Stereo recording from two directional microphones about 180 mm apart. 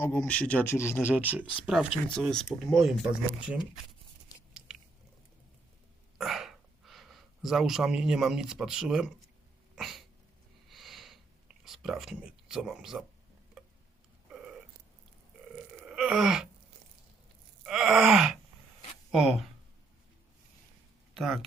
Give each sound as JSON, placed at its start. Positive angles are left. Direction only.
{"t": 0.0, "sound": "speech", "side_deg": 10}
{"t": 1.1, "sound": "speech", "side_deg": -10}
{"t": 6.1, "sound": "a sound", "side_deg": 0}
{"t": 9.7, "sound": "cat", "side_deg": 0}
{"t": 10.7, "sound": "a sound", "side_deg": 0}
{"t": 15.9, "sound": "groan", "side_deg": -5}
{"t": 17.6, "sound": "groan", "side_deg": -5}
{"t": 19.1, "sound": "speech", "side_deg": 0}
{"t": 21.2, "sound": "speech", "side_deg": 0}